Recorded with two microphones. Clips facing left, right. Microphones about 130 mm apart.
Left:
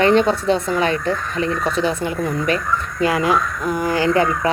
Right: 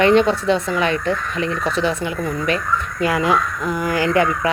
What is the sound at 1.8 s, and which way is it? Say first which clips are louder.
Speech: even; 25° right (ahead or behind).